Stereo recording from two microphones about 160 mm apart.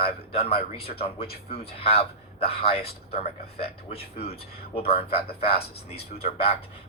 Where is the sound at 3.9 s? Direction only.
40° left (ahead or behind).